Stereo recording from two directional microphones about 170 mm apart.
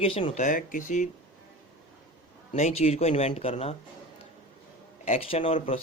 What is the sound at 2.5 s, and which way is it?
A man's voice, 40° left (ahead or behind).